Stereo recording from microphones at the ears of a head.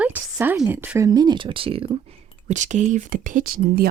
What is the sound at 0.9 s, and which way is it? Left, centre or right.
Speech, right.